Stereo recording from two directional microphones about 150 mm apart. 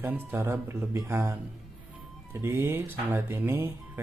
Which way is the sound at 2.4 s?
15° right (ahead or behind).